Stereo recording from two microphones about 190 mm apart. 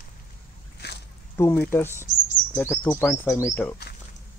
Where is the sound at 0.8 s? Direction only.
60° left (ahead or behind).